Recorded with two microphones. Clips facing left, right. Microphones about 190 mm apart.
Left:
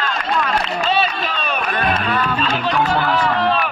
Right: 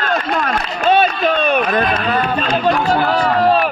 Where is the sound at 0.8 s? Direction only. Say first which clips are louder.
Right 10 dB; 55° right (ahead or behind).